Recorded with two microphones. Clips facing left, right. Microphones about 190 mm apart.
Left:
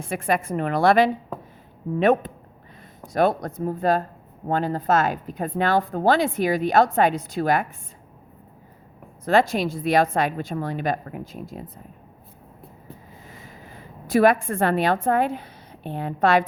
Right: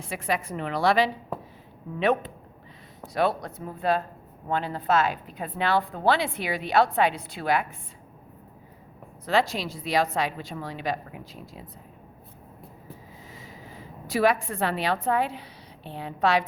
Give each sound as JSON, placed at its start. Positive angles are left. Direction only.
{"t": 0.0, "sound": "speech", "side_deg": 50}
{"t": 9.2, "sound": "speech", "side_deg": 50}
{"t": 13.3, "sound": "a woman's voice", "side_deg": 55}